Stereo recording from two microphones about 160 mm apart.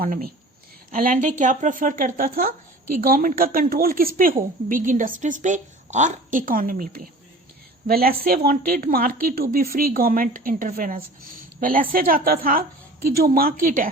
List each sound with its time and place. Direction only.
0.0 s a woman's voice: 65° right (ahead or behind)
0.9 s a woman's voice: 55° right (ahead or behind)